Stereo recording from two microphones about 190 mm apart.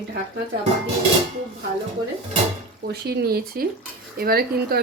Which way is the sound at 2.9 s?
55° right (ahead or behind).